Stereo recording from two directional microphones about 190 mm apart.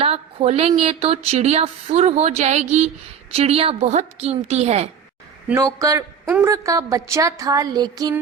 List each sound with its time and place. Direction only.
0.0 s speech: 30° right (ahead or behind)
5.5 s a woman's voice: 15° right (ahead or behind)